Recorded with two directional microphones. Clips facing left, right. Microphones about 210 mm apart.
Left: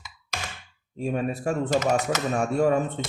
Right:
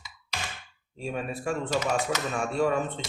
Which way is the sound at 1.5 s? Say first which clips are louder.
Left 4 dB; 45° left (ahead or behind).